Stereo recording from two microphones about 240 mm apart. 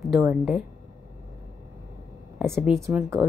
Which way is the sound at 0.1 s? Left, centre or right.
Centre.